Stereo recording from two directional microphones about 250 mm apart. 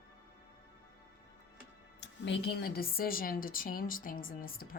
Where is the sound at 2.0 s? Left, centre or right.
Left.